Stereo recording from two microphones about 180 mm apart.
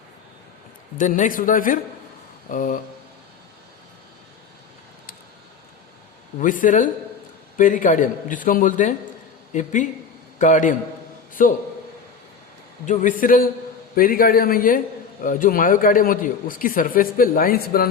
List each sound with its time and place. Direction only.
0.9 s a man's voice: 45° left (ahead or behind)
6.4 s a man's voice: 45° left (ahead or behind)
12.8 s a man's voice: 45° left (ahead or behind)